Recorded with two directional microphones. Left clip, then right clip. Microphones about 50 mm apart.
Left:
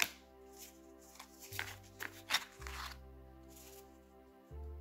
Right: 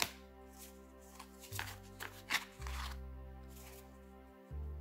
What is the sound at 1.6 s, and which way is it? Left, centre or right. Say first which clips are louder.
Music: left 1 dB; left.